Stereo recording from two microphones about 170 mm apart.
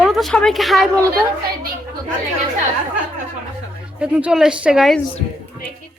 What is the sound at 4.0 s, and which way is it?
Speech, 5° right (ahead or behind).